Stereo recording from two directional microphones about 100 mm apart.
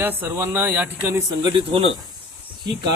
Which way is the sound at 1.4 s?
55° right (ahead or behind).